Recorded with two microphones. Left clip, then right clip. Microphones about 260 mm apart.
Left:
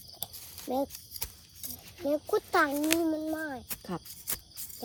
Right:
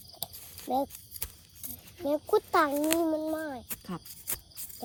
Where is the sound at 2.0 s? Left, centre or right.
Right.